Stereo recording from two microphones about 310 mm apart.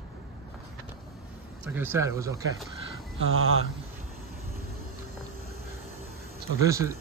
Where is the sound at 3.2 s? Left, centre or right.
Right.